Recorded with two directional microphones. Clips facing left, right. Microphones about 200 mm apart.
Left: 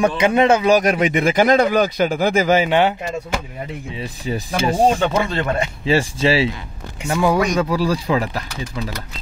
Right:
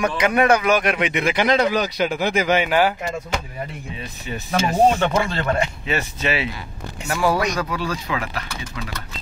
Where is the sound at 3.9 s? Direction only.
30° left (ahead or behind).